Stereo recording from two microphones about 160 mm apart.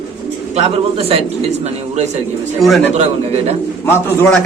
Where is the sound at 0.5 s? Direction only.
40° right (ahead or behind).